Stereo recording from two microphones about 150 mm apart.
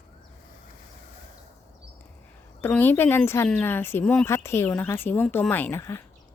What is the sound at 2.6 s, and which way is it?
Speech, 15° left (ahead or behind).